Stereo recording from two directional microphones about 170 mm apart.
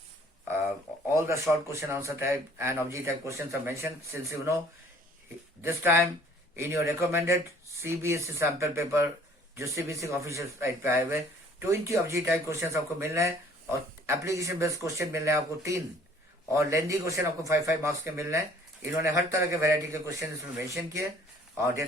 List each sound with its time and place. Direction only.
1.1 s a man's voice: 15° right (ahead or behind)
5.6 s a man's voice: 15° right (ahead or behind)